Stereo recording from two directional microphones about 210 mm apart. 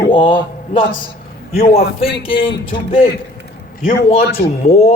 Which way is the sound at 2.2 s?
25° left (ahead or behind).